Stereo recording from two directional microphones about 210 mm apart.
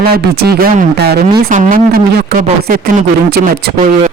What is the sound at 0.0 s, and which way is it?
Speech, 45° right (ahead or behind).